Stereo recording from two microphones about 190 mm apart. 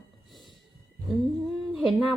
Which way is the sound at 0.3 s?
Centre (ahead or behind).